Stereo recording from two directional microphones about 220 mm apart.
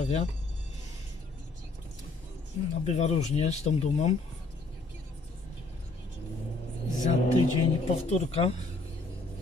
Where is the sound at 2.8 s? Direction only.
30° left (ahead or behind).